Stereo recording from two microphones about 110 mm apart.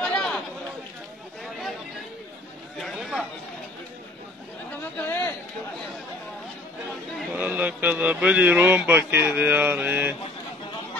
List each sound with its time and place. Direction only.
0.0 s chatter: 5° left (ahead or behind)
2.8 s chatter: centre (ahead or behind)
4.9 s chatter: 20° left (ahead or behind)
7.3 s speech: 15° right (ahead or behind)